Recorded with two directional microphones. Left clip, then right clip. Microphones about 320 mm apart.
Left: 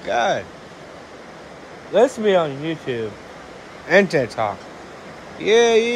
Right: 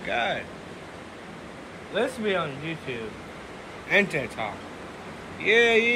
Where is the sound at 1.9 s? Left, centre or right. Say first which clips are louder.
Left 11 dB; left.